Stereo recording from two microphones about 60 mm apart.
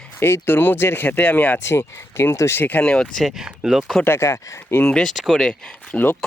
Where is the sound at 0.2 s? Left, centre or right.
Left.